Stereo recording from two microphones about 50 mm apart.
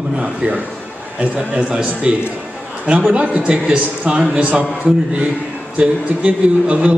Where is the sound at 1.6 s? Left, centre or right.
Centre.